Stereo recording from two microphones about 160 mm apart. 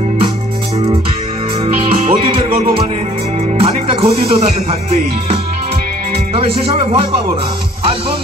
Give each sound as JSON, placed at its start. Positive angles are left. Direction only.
{"t": 1.8, "sound": "music", "side_deg": -35}
{"t": 3.5, "sound": "music", "side_deg": -35}